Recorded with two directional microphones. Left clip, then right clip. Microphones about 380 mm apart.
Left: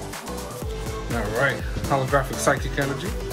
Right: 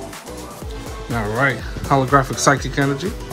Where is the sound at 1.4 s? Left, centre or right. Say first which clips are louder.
Right 4 dB; centre.